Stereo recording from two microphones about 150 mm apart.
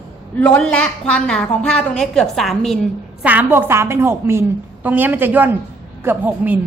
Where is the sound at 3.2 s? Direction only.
10° right (ahead or behind).